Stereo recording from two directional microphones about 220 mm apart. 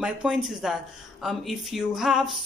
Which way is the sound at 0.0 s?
5° right (ahead or behind).